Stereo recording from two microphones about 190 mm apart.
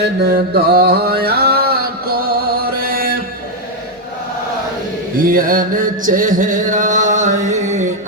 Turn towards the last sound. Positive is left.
turn(degrees=-40)  # may be behind; listen again after turning